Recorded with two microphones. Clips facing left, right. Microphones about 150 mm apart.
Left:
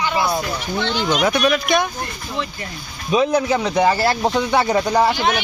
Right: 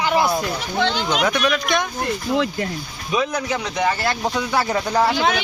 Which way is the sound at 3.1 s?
25° left (ahead or behind).